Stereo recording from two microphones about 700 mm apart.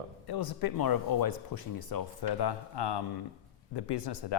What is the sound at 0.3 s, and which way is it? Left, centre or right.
Speech, left.